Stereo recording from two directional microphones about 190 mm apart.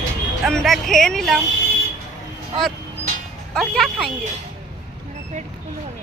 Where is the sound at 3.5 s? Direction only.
Centre (ahead or behind).